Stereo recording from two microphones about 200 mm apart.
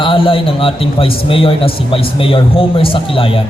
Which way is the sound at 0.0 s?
25° left (ahead or behind).